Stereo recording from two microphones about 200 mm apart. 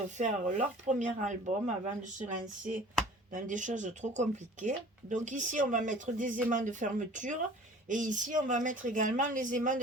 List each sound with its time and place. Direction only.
0.2 s speech: 35° right (ahead or behind)